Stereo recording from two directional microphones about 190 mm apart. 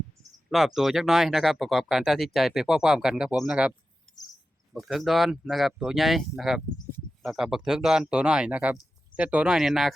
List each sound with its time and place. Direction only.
0.5 s speech: centre (ahead or behind)
4.7 s speech: centre (ahead or behind)